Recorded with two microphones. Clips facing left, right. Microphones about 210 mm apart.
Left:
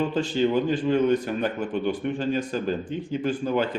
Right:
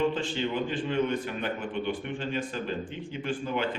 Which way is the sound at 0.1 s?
40° left (ahead or behind).